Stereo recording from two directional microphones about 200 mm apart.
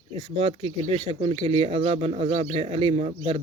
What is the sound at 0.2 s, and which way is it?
Speech, 30° right (ahead or behind).